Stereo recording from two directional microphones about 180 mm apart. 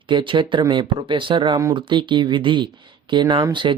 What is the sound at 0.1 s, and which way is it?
Speech, 25° right (ahead or behind).